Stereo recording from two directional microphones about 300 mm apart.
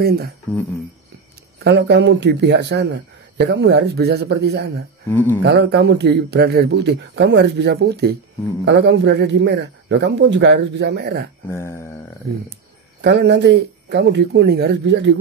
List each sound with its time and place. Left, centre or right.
0.0 s speech: right
1.6 s speech: right
5.1 s speech: centre
5.4 s speech: right
11.5 s a sound: centre
13.0 s speech: right